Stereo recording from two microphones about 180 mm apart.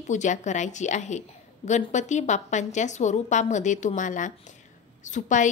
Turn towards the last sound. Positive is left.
turn(degrees=45)  # may be behind; listen again after turning